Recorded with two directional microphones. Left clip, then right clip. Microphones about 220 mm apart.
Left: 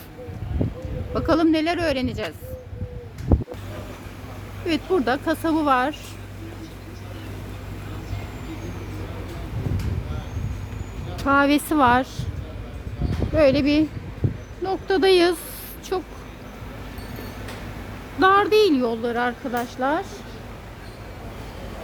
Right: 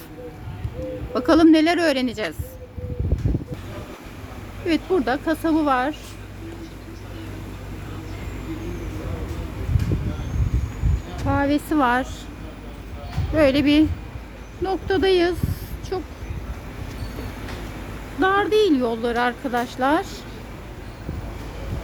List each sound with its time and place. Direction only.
1.1 s speech: 5° right (ahead or behind)
4.6 s speech: 10° left (ahead or behind)
11.2 s speech: 30° left (ahead or behind)
13.3 s speech: 10° left (ahead or behind)
18.2 s speech: 20° left (ahead or behind); by 20.1 s centre (ahead or behind)